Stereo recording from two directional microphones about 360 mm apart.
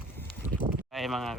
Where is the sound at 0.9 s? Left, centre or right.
Centre.